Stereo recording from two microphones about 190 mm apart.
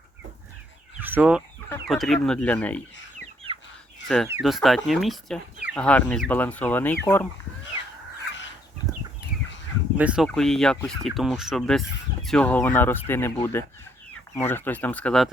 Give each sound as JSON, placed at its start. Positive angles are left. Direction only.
{"t": 1.0, "sound": "fowl", "side_deg": -10}
{"t": 1.9, "sound": "speech", "side_deg": 0}
{"t": 3.2, "sound": "chicken", "side_deg": -30}
{"t": 4.0, "sound": "speech", "side_deg": 5}
{"t": 10.0, "sound": "speech", "side_deg": -5}